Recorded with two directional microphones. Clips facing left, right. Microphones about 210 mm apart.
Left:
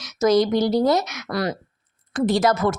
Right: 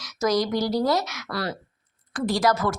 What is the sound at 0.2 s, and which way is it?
A woman's voice, 25° left (ahead or behind).